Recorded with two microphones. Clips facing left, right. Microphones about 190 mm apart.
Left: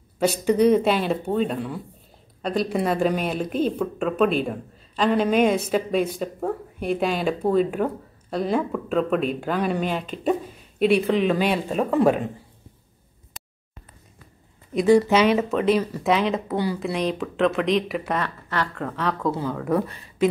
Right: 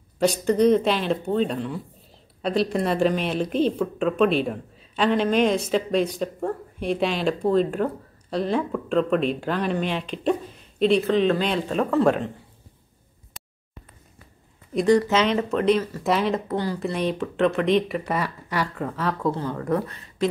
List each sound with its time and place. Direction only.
0.2 s speech: 10° left (ahead or behind)
13.4 s a sound: centre (ahead or behind)
14.7 s speech: 5° left (ahead or behind)